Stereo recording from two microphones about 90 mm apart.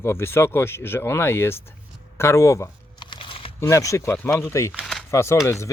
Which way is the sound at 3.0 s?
75° left (ahead or behind).